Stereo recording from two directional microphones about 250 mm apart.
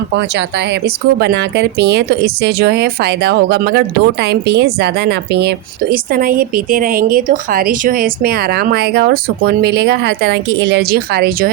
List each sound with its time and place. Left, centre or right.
0.2 s speech: right